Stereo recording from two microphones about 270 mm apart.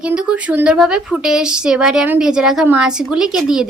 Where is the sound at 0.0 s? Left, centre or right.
Centre.